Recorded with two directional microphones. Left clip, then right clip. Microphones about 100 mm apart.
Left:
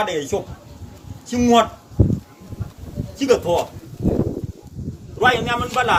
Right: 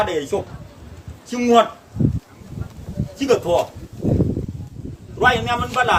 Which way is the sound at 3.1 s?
30° right (ahead or behind).